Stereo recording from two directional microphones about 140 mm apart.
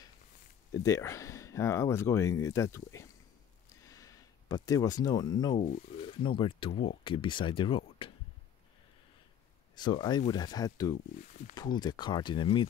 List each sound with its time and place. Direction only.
0.7 s speech: 20° left (ahead or behind); by 8.1 s 40° left (ahead or behind)
9.8 s speech: 30° left (ahead or behind)